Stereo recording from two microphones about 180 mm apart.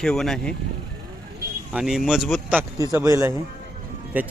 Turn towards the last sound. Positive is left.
turn(degrees=-10)  # may be behind; listen again after turning